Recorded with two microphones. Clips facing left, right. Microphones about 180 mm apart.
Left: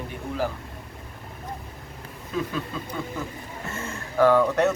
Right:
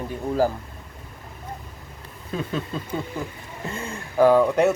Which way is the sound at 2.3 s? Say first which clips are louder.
Left 1 dB; 35° right (ahead or behind).